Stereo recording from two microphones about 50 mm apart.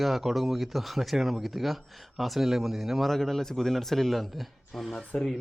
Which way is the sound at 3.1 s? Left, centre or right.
Centre.